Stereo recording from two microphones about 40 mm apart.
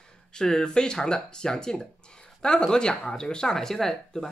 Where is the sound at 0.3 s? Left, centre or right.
Centre.